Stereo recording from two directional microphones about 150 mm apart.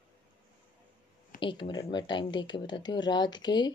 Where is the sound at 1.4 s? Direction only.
35° left (ahead or behind).